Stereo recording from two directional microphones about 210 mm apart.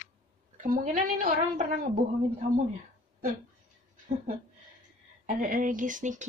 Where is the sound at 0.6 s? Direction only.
40° right (ahead or behind).